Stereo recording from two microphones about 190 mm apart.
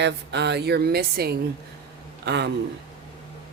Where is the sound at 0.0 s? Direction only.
65° right (ahead or behind).